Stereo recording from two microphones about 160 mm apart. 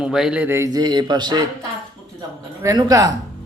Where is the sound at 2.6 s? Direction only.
20° right (ahead or behind).